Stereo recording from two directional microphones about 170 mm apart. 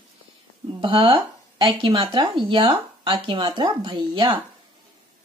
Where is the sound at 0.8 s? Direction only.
30° right (ahead or behind).